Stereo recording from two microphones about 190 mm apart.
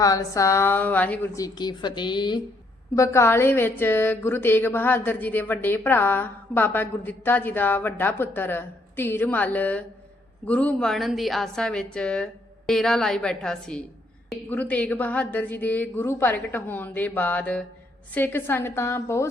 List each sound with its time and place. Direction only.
0.0 s a woman's voice: 15° left (ahead or behind)
1.5 s a woman's voice: 25° left (ahead or behind)